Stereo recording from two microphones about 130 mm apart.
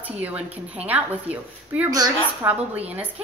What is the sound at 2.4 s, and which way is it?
Speech, 15° right (ahead or behind).